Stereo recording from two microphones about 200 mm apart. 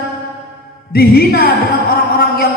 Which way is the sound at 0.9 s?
50° left (ahead or behind).